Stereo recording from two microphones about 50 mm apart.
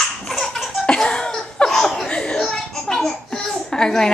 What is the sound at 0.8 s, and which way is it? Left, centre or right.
Laughter, centre.